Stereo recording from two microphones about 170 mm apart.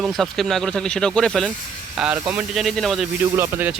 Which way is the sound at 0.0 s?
Centre (ahead or behind).